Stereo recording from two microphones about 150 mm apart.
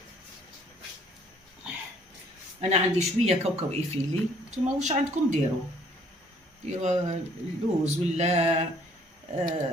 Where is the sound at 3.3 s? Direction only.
45° right (ahead or behind).